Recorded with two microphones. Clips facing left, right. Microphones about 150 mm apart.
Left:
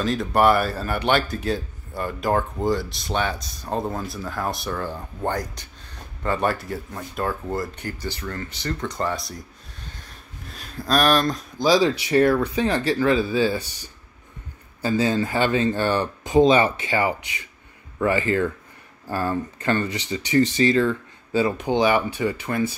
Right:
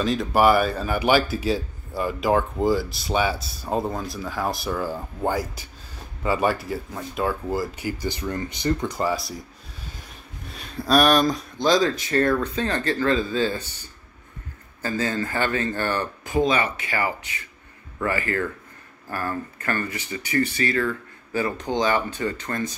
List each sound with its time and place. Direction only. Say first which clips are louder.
0.0 s speech: even; centre (ahead or behind)
10.4 s speech: right 2 dB; centre (ahead or behind)